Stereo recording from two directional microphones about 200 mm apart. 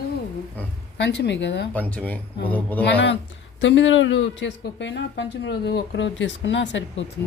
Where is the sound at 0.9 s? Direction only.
60° left (ahead or behind).